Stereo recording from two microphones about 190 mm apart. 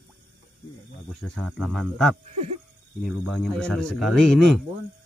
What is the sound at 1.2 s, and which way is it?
A man's voice, 5° left (ahead or behind).